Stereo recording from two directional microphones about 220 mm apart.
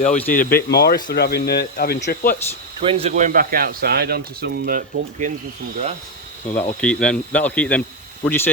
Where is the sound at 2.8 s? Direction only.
25° right (ahead or behind).